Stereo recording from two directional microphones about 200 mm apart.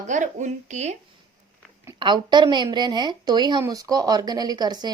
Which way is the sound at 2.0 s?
20° right (ahead or behind).